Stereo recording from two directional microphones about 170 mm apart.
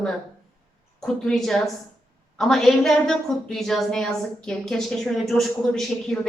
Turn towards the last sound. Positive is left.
turn(degrees=5)  # may be behind; listen again after turning